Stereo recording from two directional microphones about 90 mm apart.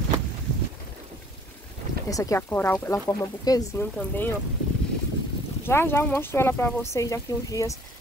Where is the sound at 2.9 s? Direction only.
40° left (ahead or behind).